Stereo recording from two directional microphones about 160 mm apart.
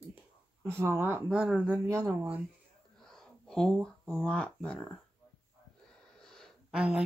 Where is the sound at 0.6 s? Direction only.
15° right (ahead or behind).